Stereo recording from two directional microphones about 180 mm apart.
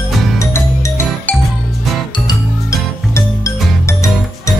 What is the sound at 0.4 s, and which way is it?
Music, 15° left (ahead or behind).